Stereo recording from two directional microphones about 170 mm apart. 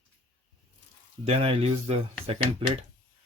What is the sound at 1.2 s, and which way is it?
Speech, 35° right (ahead or behind).